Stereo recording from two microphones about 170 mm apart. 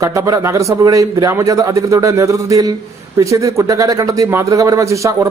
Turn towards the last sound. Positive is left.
turn(degrees=-20)  # may be behind; listen again after turning